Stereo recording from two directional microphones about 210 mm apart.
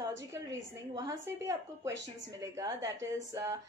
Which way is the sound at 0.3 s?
15° right (ahead or behind).